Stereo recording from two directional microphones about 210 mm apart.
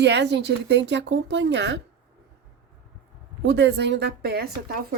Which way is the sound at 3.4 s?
55° right (ahead or behind).